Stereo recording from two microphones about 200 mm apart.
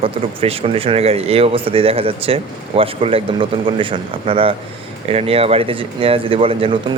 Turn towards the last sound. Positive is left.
turn(degrees=-25)  # may be behind; listen again after turning